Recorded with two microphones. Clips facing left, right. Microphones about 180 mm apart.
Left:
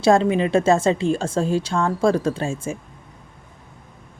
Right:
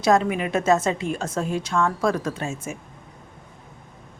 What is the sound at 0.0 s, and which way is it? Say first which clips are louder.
A woman's voice: left 4 dB; 30° left (ahead or behind).